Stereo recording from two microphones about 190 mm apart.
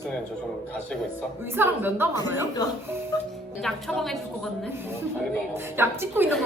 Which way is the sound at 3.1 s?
20° left (ahead or behind).